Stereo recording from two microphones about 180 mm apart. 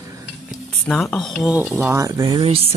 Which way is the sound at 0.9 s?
10° left (ahead or behind).